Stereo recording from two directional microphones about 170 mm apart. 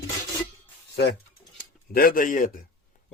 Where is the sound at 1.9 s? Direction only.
60° left (ahead or behind).